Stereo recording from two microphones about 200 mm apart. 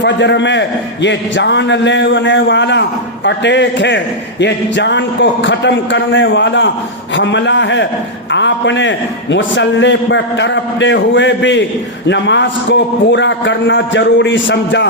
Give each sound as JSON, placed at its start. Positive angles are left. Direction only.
{"t": 0.0, "sound": "a man's voice", "side_deg": 60}